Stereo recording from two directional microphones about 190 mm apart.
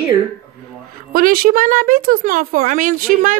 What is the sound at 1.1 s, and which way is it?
A woman's voice, 50° right (ahead or behind).